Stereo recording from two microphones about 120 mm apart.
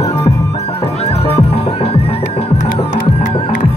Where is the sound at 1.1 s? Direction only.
55° left (ahead or behind).